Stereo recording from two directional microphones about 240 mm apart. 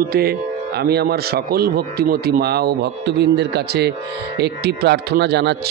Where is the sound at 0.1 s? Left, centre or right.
Right.